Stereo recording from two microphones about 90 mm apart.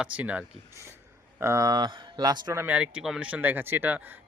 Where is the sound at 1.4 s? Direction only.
35° right (ahead or behind); by 2.5 s 50° right (ahead or behind).